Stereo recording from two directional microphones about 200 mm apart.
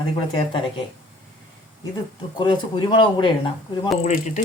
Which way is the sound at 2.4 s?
20° left (ahead or behind).